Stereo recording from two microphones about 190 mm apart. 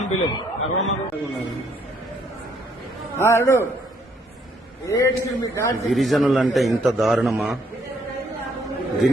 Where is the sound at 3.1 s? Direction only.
15° left (ahead or behind).